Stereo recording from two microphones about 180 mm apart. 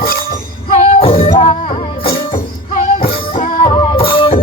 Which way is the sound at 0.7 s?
35° left (ahead or behind).